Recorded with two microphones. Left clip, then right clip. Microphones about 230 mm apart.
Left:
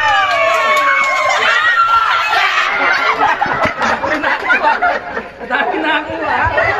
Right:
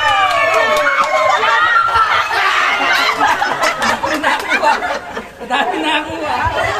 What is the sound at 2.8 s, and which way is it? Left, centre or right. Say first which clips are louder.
Snicker: left 1 dB; right.